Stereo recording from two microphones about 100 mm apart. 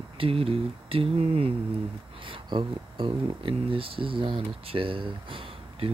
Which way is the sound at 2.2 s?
55° right (ahead or behind).